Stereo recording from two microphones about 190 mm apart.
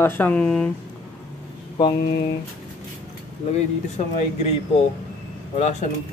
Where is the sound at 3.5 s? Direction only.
35° left (ahead or behind).